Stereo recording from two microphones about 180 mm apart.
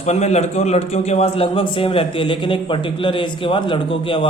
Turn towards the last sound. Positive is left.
turn(degrees=30)  # may be behind; listen again after turning